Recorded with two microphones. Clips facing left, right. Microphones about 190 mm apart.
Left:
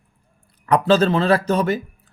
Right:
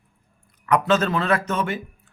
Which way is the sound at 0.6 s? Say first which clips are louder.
Left 4 dB; 30° left (ahead or behind).